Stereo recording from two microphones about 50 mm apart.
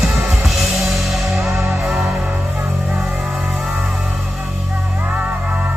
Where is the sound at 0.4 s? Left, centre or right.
Centre.